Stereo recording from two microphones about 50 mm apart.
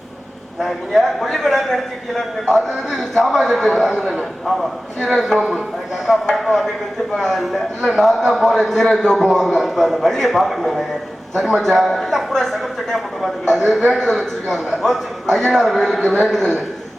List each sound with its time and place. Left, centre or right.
0.6 s a man's voice: centre
5.4 s a man's voice: centre
6.3 s a man's voice: centre